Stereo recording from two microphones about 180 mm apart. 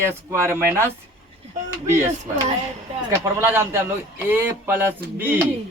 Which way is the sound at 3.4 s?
10° right (ahead or behind).